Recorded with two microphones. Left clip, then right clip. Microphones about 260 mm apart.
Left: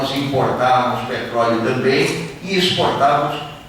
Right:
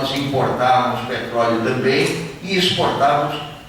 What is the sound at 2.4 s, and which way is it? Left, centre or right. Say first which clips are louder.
Speech: left 1 dB; centre.